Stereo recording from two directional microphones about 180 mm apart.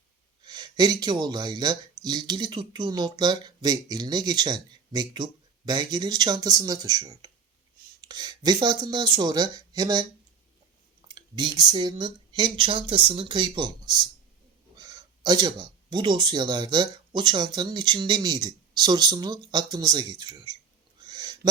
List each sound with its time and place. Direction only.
0.4 s speech: 20° right (ahead or behind)
11.1 s speech: 25° right (ahead or behind)
21.1 s a sound: 25° right (ahead or behind)